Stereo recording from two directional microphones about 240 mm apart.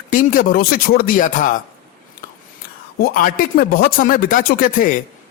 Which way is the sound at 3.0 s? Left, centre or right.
Left.